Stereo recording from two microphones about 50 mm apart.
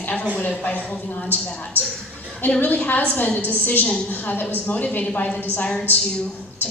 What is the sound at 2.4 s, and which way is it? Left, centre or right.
A woman's voice, left.